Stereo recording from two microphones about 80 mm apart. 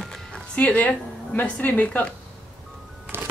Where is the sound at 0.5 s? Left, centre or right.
Centre.